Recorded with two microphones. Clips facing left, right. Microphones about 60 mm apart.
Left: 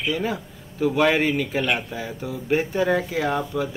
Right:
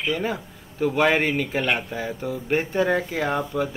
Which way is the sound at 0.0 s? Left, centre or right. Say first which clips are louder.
Even; centre.